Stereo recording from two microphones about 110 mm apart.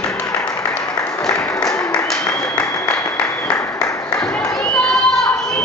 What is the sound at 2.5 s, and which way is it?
Applause, 10° left (ahead or behind).